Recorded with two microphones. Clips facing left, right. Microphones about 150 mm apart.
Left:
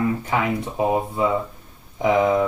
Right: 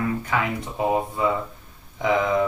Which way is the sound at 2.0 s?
20° left (ahead or behind).